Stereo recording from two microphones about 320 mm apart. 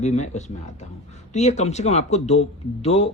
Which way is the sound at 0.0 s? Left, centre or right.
Left.